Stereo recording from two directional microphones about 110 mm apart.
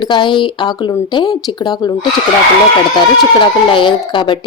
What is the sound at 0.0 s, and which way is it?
A woman's voice, 45° left (ahead or behind).